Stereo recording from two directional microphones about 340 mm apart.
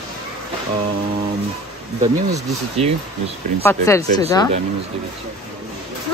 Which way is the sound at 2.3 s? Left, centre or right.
Centre.